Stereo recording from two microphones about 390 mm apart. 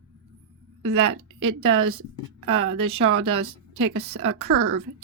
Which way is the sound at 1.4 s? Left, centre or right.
Right.